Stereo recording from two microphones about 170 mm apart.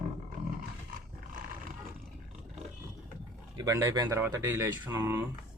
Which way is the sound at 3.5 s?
15° right (ahead or behind).